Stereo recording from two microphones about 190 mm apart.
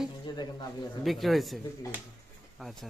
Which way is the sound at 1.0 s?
Centre (ahead or behind).